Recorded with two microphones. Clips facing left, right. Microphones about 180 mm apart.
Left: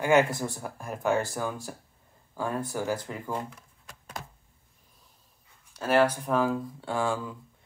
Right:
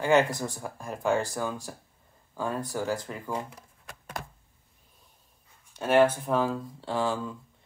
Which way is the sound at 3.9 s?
60° right (ahead or behind).